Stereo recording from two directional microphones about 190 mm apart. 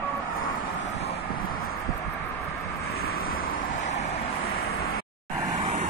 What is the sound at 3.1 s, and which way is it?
Vehicle, 50° left (ahead or behind).